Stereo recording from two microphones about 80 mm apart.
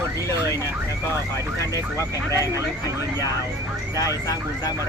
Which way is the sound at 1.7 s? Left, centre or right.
Left.